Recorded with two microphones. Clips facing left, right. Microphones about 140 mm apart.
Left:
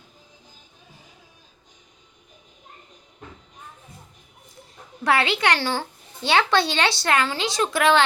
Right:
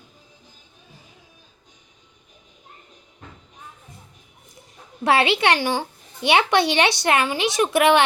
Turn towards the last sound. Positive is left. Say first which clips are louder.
# right 3 dB
turn(degrees=-20)  # may be behind; listen again after turning